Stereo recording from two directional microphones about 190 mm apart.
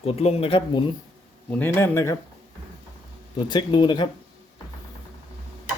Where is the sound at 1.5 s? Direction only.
10° left (ahead or behind).